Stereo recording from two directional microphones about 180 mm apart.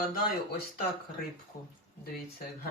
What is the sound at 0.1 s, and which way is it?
Speech, 55° left (ahead or behind).